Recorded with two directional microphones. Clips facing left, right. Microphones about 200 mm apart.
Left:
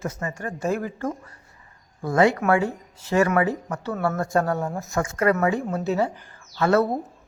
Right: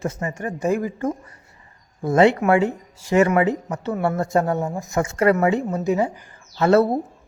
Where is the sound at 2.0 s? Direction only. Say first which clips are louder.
Right 3 dB; 25° right (ahead or behind).